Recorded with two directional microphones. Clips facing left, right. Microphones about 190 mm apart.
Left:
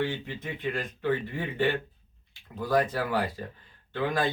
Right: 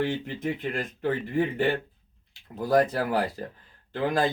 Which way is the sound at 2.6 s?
40° right (ahead or behind).